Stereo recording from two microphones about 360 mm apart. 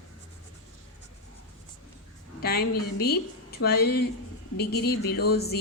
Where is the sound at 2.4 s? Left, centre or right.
Left.